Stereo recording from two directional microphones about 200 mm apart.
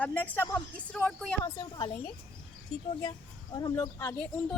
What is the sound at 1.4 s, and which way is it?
Speech, 20° left (ahead or behind).